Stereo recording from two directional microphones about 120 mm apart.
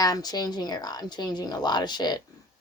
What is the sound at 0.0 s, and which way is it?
Speech, 30° left (ahead or behind).